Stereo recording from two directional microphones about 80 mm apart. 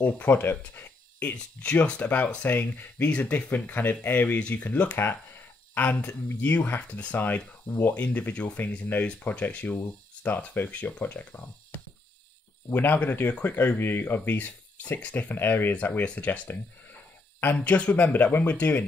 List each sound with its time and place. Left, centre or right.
0.0 s speech: left
1.3 s speech: centre
9.7 s speech: left
17.6 s speech: centre